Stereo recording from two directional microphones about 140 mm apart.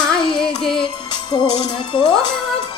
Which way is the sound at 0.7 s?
30° left (ahead or behind).